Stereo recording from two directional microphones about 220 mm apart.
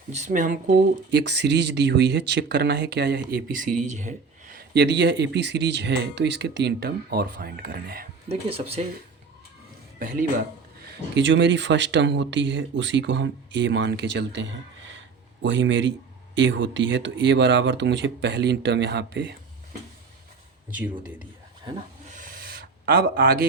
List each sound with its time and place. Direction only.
0.1 s speech: 35° right (ahead or behind)
1.1 s speech: 50° right (ahead or behind)
8.3 s speech: 25° right (ahead or behind)
10.0 s speech: 40° right (ahead or behind)
22.1 s a sound: 40° right (ahead or behind)